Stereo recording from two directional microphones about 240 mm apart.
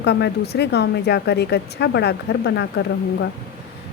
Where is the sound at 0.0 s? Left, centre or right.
Left.